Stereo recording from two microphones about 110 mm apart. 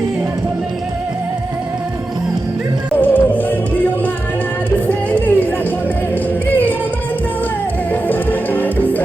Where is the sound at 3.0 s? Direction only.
15° left (ahead or behind).